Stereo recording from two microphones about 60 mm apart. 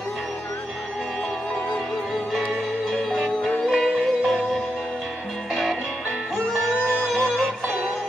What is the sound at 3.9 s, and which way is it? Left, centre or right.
Music, centre.